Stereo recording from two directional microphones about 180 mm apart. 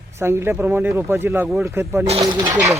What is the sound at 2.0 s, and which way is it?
Speech, 30° right (ahead or behind).